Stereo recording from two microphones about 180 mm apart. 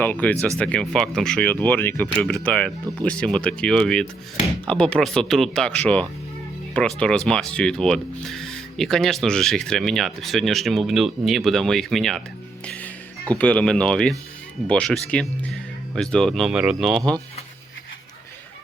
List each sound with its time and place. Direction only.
0.0 s speech: 10° left (ahead or behind)